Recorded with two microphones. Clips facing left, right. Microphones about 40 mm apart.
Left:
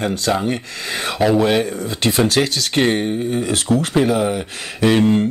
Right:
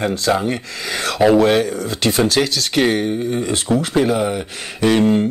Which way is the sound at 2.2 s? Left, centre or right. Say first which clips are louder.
Even; left.